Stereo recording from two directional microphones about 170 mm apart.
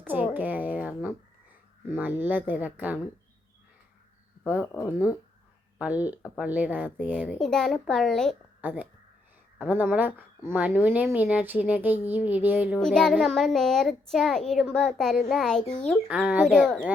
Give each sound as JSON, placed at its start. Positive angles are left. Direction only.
{"t": 0.1, "sound": "speech", "side_deg": -10}
{"t": 4.6, "sound": "speech", "side_deg": 15}
{"t": 5.8, "sound": "a child's voice", "side_deg": -10}
{"t": 8.6, "sound": "speech", "side_deg": -10}
{"t": 12.8, "sound": "a child's voice", "side_deg": 5}
{"t": 16.0, "sound": "a child's voice", "side_deg": -5}